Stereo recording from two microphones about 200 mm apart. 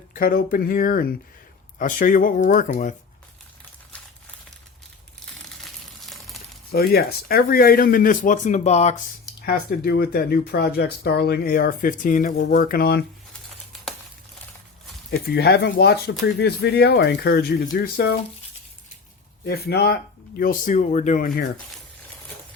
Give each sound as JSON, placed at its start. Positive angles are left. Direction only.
{"t": 0.1, "sound": "speech", "side_deg": 45}
{"t": 5.5, "sound": "a sound", "side_deg": 0}
{"t": 6.7, "sound": "speech", "side_deg": 50}
{"t": 9.5, "sound": "speech", "side_deg": 50}
{"t": 15.3, "sound": "speech", "side_deg": 55}
{"t": 19.5, "sound": "speech", "side_deg": 55}